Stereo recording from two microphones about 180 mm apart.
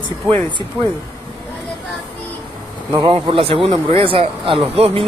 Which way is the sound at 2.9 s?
30° right (ahead or behind).